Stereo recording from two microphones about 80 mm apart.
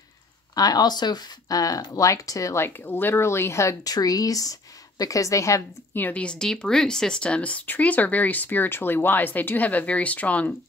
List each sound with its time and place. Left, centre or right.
0.6 s speech: left
2.8 s speech: left
3.8 s speech: left
5.9 s speech: left
6.2 s speech: centre